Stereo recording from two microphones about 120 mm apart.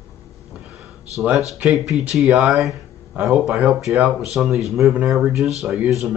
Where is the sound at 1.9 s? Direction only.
5° right (ahead or behind).